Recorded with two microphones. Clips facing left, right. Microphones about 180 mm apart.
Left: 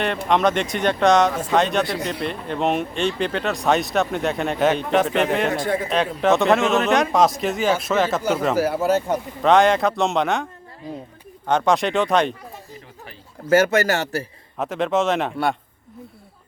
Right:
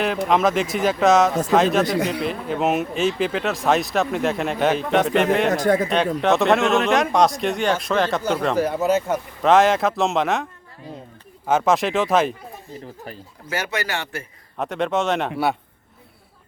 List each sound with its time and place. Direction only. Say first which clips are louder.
0.3 s speech: left 1 dB; centre (ahead or behind)
5.5 s speech: right 4 dB; 40° right (ahead or behind)
6.2 s speech: left 1 dB; centre (ahead or behind)
11.4 s speech: even; 5° right (ahead or behind)
13.5 s speech: left 9 dB; 45° left (ahead or behind)
14.6 s speech: left 1 dB; centre (ahead or behind)